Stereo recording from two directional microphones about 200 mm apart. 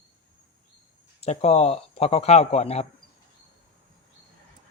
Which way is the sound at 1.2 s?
30° left (ahead or behind).